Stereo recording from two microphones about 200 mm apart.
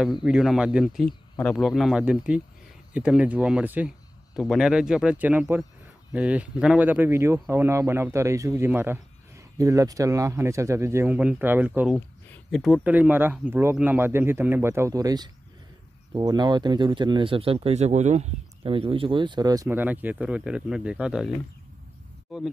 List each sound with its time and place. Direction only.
0.0 s speech: 5° right (ahead or behind)
22.3 s speech: centre (ahead or behind)